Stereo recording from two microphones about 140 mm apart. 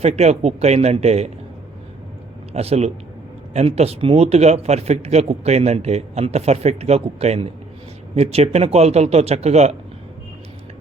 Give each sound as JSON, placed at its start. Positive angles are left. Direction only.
{"t": 0.0, "sound": "speech", "side_deg": -50}
{"t": 2.5, "sound": "speech", "side_deg": -45}